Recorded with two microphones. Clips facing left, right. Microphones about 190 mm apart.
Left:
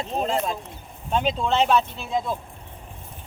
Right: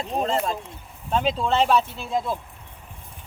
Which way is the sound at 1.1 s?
Centre (ahead or behind).